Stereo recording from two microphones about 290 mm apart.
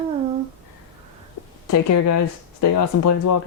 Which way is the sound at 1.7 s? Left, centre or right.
Left.